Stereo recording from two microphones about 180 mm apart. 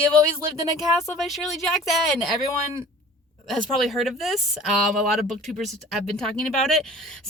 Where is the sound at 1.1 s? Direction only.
Centre (ahead or behind).